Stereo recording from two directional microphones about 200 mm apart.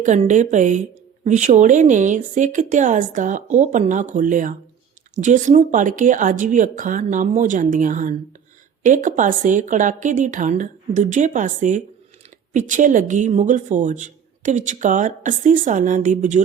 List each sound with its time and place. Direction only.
0.0 s speech: 35° right (ahead or behind)